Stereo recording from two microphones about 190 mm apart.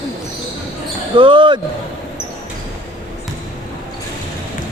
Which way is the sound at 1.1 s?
25° right (ahead or behind).